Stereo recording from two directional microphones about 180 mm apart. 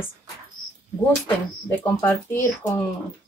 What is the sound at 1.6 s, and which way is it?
Speech, 10° left (ahead or behind).